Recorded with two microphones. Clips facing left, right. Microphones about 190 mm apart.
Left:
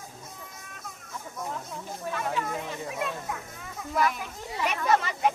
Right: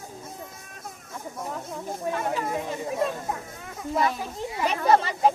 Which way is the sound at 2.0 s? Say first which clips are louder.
Right 3 dB; 30° right (ahead or behind).